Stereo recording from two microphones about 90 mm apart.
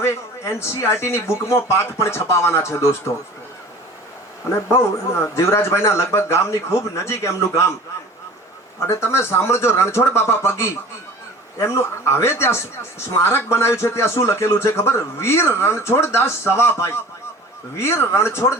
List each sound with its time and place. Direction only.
0.0 s a man's voice: 30° left (ahead or behind)
5.3 s a man's voice: 30° left (ahead or behind)
8.9 s speech: 30° left (ahead or behind)